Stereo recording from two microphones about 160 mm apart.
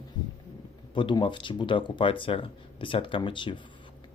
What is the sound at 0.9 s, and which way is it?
Speech, 30° left (ahead or behind).